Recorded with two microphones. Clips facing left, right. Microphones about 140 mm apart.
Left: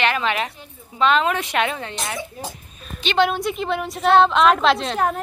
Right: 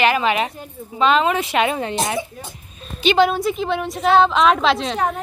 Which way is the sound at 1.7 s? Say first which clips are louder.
Right 7 dB; 15° right (ahead or behind).